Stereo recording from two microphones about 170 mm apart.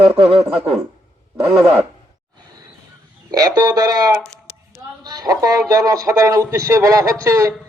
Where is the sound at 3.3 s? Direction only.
20° right (ahead or behind).